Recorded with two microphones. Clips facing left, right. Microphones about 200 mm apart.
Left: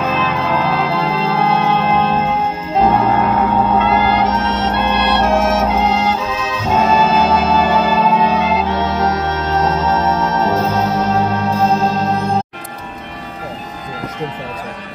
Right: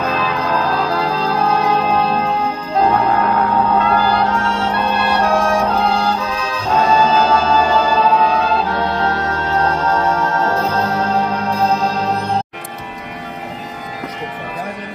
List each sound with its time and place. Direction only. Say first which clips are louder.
0.0 s music: left 1 dB; centre (ahead or behind)
4.4 s music: left 1 dB; 20° left (ahead or behind)
4.7 s music: left 2 dB; centre (ahead or behind)
10.3 s music: left 2 dB; 20° left (ahead or behind)
10.6 s music: left 2 dB; centre (ahead or behind)